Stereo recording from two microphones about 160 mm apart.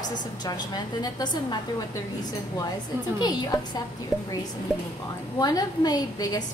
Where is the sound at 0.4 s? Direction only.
25° left (ahead or behind).